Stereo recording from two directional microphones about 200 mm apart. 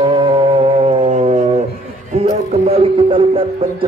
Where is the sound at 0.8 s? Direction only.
30° right (ahead or behind).